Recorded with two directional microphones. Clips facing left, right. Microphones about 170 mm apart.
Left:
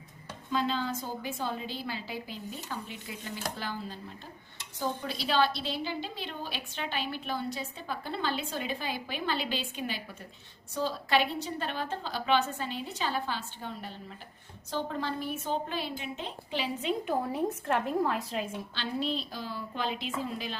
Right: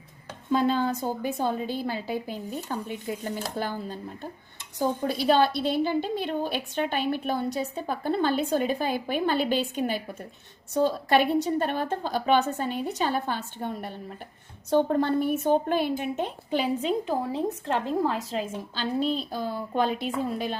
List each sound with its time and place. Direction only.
0.5 s a woman's voice: 50° right (ahead or behind)
17.3 s a woman's voice: 30° right (ahead or behind); by 20.6 s 45° right (ahead or behind)